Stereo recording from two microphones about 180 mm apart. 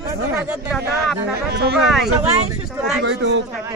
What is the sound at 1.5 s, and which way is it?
Speech, 65° right (ahead or behind).